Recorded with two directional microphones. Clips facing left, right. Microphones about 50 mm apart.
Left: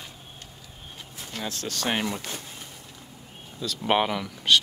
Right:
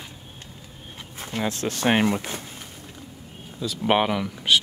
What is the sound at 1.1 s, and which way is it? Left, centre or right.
Speech, right.